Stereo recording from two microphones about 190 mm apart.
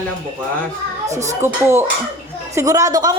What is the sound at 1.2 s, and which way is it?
A woman's voice, 15° right (ahead or behind).